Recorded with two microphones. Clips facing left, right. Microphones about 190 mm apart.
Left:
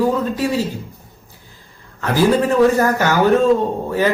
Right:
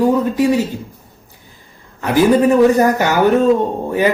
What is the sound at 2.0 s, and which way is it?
A man's voice, 15° right (ahead or behind).